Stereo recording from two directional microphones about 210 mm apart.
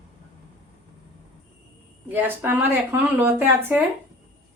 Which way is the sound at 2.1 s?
10° right (ahead or behind).